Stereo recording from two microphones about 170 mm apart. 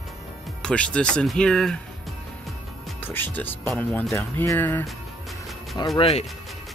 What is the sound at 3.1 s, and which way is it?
Speech, 10° left (ahead or behind).